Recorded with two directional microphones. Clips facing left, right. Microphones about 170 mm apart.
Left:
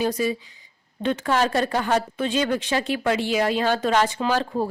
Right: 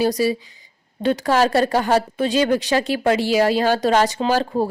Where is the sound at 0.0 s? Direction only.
35° right (ahead or behind).